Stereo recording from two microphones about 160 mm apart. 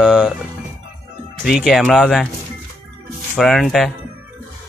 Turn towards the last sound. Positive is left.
turn(degrees=0)  # may be behind; listen again after turning